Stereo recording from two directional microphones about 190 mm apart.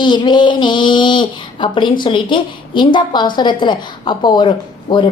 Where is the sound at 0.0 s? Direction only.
25° left (ahead or behind).